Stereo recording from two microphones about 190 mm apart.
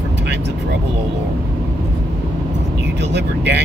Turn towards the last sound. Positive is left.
turn(degrees=-65)  # may be behind; listen again after turning